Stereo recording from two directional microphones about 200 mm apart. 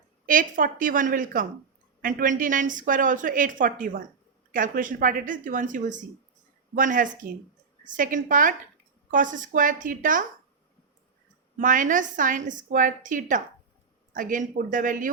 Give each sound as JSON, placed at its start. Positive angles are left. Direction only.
{"t": 0.3, "sound": "a woman's voice", "side_deg": -45}
{"t": 11.5, "sound": "a woman's voice", "side_deg": -40}